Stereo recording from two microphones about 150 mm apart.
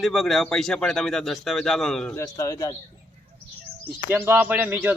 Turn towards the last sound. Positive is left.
turn(degrees=-10)  # may be behind; listen again after turning